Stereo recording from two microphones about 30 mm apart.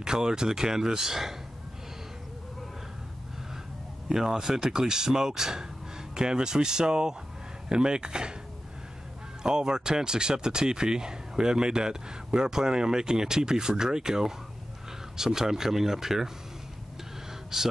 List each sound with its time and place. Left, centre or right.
0.0 s speech: right
4.1 s speech: centre
9.4 s speech: right
17.5 s speech: centre